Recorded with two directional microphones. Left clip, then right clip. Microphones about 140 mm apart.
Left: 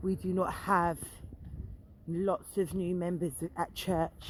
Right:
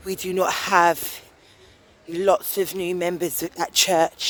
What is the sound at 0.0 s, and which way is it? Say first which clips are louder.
Speech: right 10 dB; 30° right (ahead or behind).